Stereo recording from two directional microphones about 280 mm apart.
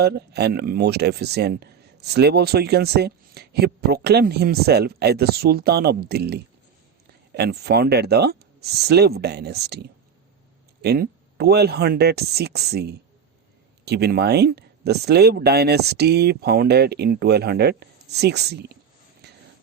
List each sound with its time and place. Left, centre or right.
0.0 s speech: right
10.8 s speech: right
19.2 s a sound: right